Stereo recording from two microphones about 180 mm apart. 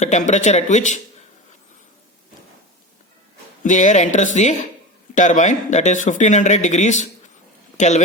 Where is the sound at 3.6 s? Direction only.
45° left (ahead or behind).